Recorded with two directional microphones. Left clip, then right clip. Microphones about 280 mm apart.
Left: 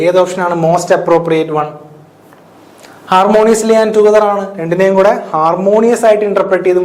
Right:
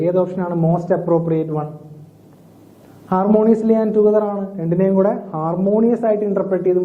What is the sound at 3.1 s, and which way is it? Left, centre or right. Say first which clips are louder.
Speech: left 8 dB; centre.